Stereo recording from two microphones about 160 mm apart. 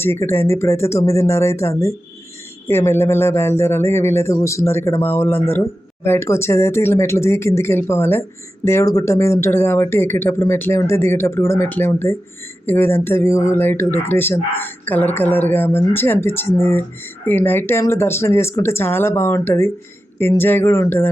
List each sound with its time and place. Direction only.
0.0 s speech: 15° left (ahead or behind)